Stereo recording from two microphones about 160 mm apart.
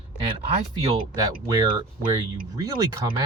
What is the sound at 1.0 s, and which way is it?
Speech, 25° right (ahead or behind).